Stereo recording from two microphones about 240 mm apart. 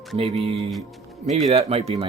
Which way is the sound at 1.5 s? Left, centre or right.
Right.